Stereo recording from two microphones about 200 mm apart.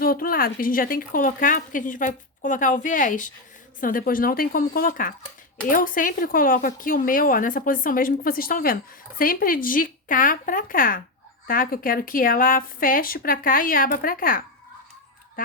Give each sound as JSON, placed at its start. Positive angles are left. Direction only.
{"t": 0.0, "sound": "a woman's voice", "side_deg": 45}
{"t": 15.4, "sound": "honk", "side_deg": 45}